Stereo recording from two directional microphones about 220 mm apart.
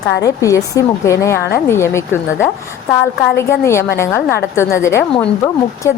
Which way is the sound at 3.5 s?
10° left (ahead or behind).